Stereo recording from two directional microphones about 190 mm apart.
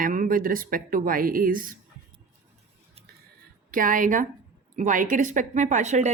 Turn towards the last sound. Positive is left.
turn(degrees=-40)  # may be behind; listen again after turning